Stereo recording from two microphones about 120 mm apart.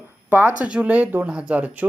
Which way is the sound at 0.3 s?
15° right (ahead or behind).